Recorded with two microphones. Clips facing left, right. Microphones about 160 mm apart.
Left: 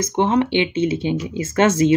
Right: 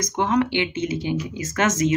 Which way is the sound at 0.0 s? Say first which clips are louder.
Left 3 dB; 25° left (ahead or behind).